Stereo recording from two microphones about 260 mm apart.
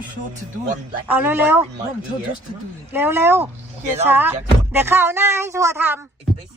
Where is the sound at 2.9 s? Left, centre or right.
Centre.